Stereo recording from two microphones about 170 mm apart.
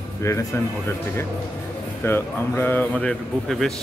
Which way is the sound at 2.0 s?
10° left (ahead or behind).